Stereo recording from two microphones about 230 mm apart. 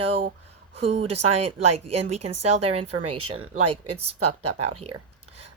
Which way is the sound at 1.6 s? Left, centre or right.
Right.